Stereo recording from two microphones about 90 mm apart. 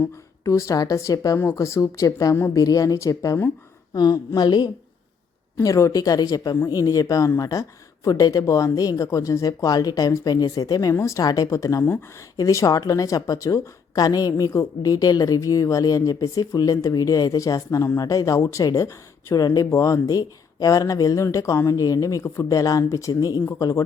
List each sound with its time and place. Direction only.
0.0 s a woman's voice: 35° left (ahead or behind); by 4.7 s 50° left (ahead or behind)
5.6 s a woman's voice: 35° left (ahead or behind)